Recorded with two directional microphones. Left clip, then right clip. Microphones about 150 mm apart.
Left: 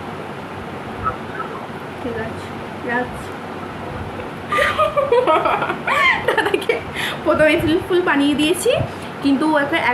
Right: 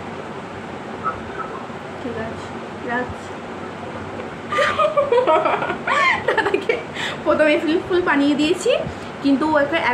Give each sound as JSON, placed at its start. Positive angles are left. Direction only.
{"t": 4.5, "sound": "chuckle", "side_deg": 15}
{"t": 9.2, "sound": "a woman's voice", "side_deg": 15}